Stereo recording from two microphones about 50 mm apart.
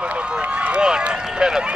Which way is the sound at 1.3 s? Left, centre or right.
Centre.